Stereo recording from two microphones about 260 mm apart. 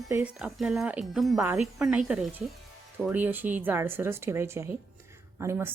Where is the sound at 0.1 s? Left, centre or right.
Centre.